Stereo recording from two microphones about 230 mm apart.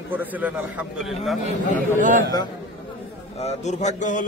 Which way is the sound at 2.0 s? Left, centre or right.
Right.